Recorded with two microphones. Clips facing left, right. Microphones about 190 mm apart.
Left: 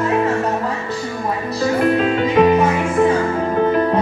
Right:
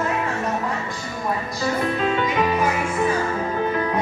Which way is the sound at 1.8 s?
65° left (ahead or behind).